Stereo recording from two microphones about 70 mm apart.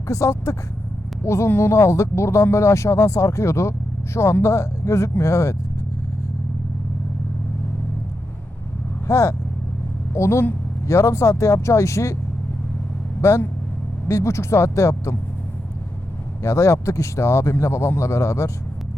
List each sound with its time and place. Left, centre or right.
0.1 s speech: left
9.0 s speech: left
13.2 s speech: left
16.4 s speech: left